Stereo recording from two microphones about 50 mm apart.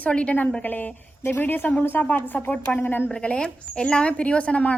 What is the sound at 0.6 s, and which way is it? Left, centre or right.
Speech, left.